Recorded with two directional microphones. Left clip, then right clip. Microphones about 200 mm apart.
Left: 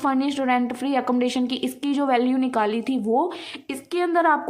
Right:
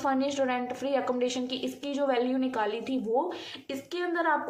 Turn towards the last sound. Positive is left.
turn(degrees=50)  # may be behind; listen again after turning